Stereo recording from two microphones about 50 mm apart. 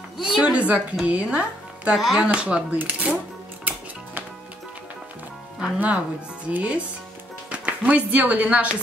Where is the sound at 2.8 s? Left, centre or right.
Right.